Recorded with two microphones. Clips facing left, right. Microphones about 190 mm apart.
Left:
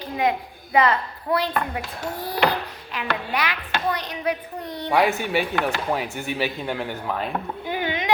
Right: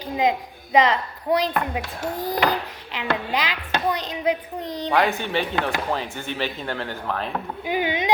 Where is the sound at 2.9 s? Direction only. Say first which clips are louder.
Right 2 dB; 20° right (ahead or behind).